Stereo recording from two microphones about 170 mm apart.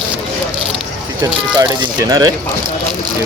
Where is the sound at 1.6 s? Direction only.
25° right (ahead or behind).